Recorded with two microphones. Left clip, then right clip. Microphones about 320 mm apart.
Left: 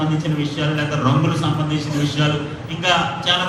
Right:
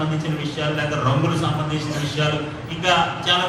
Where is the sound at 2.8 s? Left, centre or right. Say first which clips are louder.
Left 1 dB; left.